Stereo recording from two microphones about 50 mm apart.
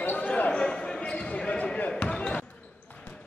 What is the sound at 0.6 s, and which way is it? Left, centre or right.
Basketball bounce, centre.